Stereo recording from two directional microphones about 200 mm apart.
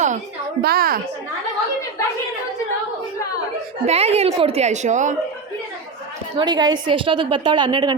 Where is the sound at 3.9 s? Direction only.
30° right (ahead or behind).